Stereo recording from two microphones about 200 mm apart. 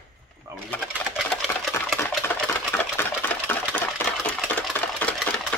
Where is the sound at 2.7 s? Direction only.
10° left (ahead or behind).